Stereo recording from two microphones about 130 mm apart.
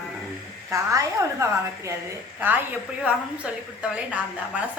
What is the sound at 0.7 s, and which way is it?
Speech, 25° right (ahead or behind).